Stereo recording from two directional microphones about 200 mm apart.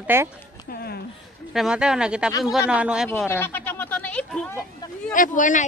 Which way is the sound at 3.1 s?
10° left (ahead or behind).